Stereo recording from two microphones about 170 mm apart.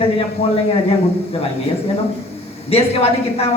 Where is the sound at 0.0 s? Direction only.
35° left (ahead or behind).